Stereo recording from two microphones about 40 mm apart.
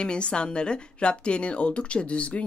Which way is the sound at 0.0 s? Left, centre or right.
Left.